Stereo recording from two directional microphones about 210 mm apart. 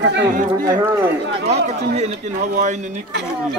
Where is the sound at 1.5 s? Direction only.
30° right (ahead or behind).